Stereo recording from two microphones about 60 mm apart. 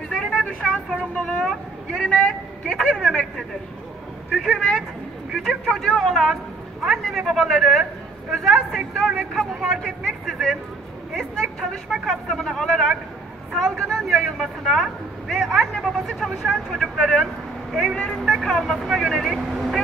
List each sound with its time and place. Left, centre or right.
0.1 s vehicle: centre
1.2 s speech: centre
3.0 s a man's voice: centre